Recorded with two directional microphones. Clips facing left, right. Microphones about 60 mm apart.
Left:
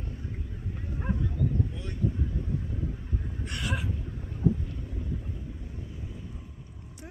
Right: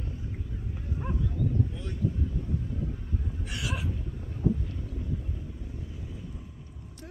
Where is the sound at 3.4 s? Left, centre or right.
Centre.